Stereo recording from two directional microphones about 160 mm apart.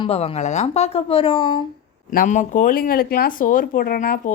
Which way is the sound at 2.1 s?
55° left (ahead or behind).